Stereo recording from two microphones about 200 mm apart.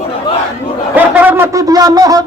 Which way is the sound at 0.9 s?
10° right (ahead or behind).